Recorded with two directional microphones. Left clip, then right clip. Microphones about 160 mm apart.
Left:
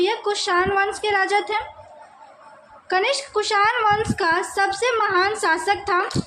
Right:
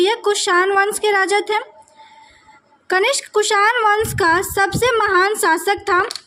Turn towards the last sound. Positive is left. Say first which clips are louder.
# right 4 dB
turn(degrees=-50)  # may be behind; listen again after turning